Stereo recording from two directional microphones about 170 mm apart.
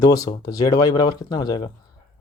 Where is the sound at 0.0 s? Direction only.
25° left (ahead or behind).